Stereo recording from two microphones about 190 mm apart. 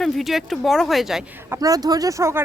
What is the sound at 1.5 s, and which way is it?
Speech, 20° right (ahead or behind).